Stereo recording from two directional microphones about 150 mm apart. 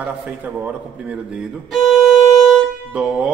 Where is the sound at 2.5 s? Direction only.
5° right (ahead or behind).